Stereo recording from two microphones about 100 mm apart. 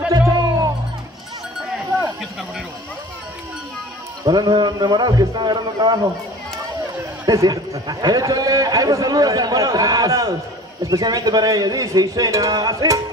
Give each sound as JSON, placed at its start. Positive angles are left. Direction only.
{"t": 0.3, "sound": "music", "side_deg": -40}
{"t": 4.2, "sound": "a man's voice", "side_deg": -45}
{"t": 7.2, "sound": "a man's voice", "side_deg": -35}